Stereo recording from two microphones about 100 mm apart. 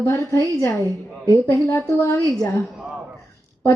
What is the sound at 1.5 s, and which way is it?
Speech, 30° left (ahead or behind).